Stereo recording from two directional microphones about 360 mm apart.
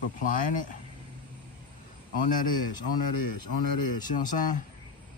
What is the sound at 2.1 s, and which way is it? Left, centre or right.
A man's voice, left.